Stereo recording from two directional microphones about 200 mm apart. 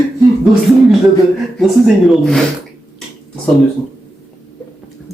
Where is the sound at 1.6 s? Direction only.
Centre (ahead or behind).